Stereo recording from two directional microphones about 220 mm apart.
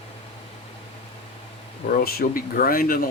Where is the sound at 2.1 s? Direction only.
40° left (ahead or behind).